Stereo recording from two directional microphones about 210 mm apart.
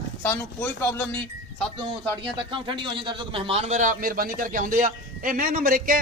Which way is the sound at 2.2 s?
25° right (ahead or behind).